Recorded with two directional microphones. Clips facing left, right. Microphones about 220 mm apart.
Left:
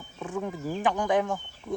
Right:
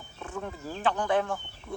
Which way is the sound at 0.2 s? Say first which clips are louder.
Left 5 dB; 15° left (ahead or behind).